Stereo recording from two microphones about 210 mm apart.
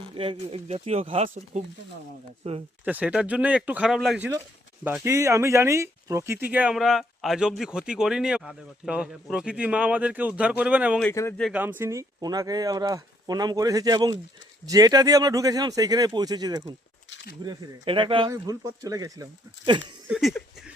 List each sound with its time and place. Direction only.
0.0 s speech: 25° right (ahead or behind)
2.8 s speech: 5° right (ahead or behind)
11.0 s a man's voice: 10° left (ahead or behind)
11.3 s speech: centre (ahead or behind)
11.6 s speech: 10° right (ahead or behind)
17.1 s a sound: 60° left (ahead or behind)
17.4 s speech: 20° right (ahead or behind)
20.1 s a sound: centre (ahead or behind)